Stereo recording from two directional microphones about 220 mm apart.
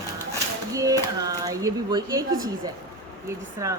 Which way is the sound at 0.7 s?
15° right (ahead or behind).